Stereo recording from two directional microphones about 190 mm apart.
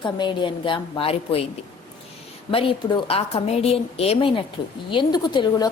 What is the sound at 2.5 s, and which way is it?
A woman's voice, 30° left (ahead or behind).